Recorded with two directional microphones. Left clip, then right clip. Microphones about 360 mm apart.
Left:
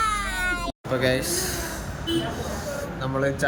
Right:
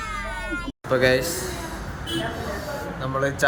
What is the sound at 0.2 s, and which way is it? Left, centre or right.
Cat, centre.